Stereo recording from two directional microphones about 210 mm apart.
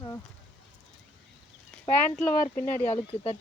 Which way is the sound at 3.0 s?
25° left (ahead or behind).